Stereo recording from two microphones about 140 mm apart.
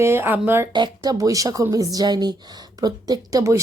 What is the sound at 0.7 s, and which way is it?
A woman's voice, 30° right (ahead or behind).